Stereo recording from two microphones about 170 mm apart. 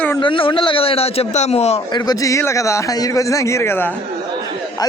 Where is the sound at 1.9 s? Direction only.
20° left (ahead or behind).